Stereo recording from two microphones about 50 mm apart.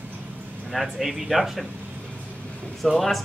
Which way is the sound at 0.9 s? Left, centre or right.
Centre.